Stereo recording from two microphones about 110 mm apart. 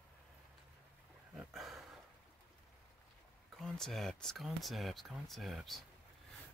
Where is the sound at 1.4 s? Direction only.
Centre (ahead or behind).